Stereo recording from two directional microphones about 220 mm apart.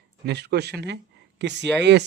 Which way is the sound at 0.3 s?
50° right (ahead or behind).